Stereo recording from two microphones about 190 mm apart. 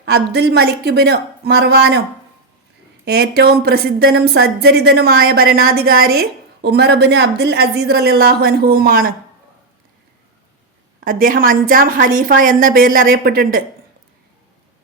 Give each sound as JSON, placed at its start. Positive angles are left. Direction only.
{"t": 0.0, "sound": "a woman's voice", "side_deg": -60}
{"t": 3.0, "sound": "a woman's voice", "side_deg": -55}
{"t": 11.0, "sound": "a woman's voice", "side_deg": -45}